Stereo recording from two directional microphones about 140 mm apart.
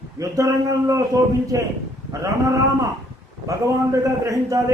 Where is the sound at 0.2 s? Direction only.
25° right (ahead or behind).